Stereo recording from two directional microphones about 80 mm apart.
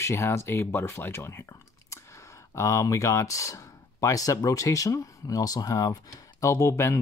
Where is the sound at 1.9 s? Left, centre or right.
Left.